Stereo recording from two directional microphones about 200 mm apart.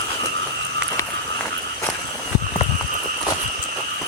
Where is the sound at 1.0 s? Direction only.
15° left (ahead or behind).